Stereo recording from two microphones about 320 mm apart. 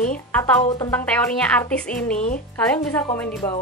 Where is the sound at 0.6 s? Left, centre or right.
Centre.